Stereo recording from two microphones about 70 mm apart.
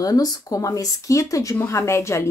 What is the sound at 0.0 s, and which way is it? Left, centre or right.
A woman's voice, left.